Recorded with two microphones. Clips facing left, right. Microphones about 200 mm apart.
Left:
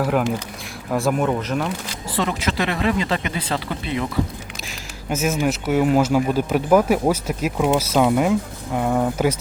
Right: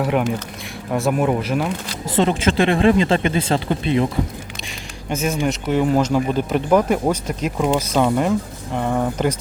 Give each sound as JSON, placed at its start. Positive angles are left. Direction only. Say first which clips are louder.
{"t": 0.0, "sound": "speech", "louder": "right 1 dB", "side_deg": 0}
{"t": 2.1, "sound": "speech", "louder": "right 6 dB", "side_deg": -25}
{"t": 5.0, "sound": "speech", "louder": "even", "side_deg": 5}